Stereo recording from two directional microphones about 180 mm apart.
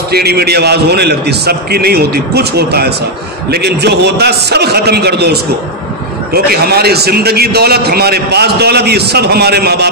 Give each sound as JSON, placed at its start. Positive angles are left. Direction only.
{"t": 0.1, "sound": "a man's voice", "side_deg": -60}